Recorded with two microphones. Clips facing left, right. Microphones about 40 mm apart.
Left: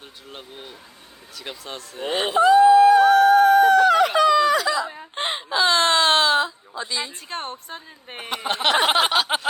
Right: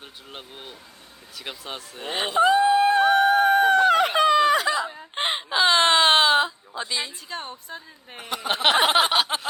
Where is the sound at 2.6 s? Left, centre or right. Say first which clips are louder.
Left 6 dB; right.